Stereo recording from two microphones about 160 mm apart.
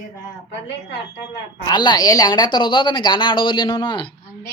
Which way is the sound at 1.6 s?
25° left (ahead or behind).